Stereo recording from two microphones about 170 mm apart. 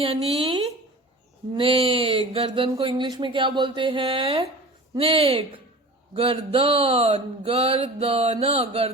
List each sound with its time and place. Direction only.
0.0 s speech: 35° right (ahead or behind)